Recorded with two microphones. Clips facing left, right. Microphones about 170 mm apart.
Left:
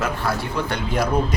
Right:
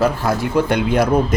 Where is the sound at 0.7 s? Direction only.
60° right (ahead or behind).